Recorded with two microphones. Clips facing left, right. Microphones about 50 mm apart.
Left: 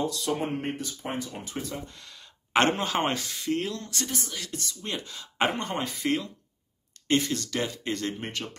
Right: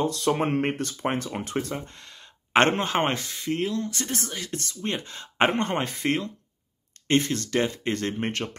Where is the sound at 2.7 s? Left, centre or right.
Right.